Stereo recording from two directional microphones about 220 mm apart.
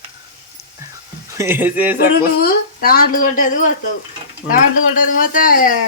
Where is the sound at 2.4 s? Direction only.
40° left (ahead or behind).